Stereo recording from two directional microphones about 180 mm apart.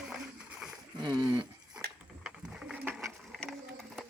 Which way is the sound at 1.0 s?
20° right (ahead or behind).